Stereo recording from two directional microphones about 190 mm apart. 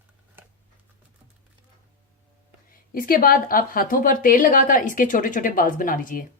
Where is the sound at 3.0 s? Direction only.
50° left (ahead or behind).